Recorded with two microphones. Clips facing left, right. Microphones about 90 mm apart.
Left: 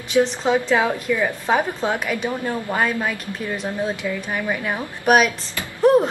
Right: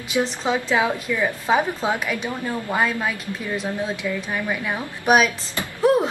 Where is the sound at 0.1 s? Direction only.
5° right (ahead or behind).